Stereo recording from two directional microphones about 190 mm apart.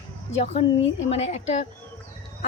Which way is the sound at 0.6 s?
30° left (ahead or behind).